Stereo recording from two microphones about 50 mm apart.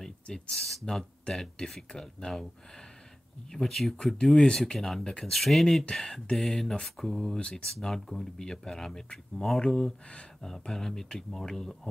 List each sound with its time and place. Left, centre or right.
0.0 s speech: centre